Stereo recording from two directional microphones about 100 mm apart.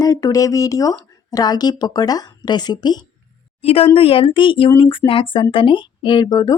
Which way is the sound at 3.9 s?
65° left (ahead or behind).